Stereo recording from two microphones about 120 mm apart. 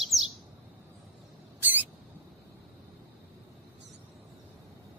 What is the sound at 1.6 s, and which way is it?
Rodents, 15° right (ahead or behind).